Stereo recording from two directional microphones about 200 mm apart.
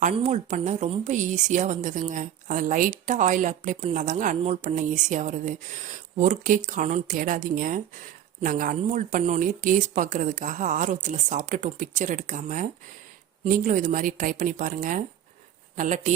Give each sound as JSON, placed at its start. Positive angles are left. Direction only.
{"t": 0.0, "sound": "a woman's voice", "side_deg": -35}